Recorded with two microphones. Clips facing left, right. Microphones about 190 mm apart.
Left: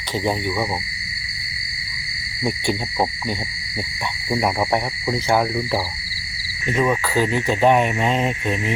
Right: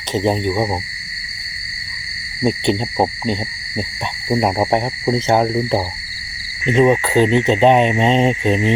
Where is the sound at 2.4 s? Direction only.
25° right (ahead or behind).